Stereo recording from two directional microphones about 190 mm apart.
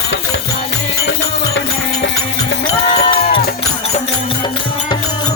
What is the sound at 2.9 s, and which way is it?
Music, 30° left (ahead or behind).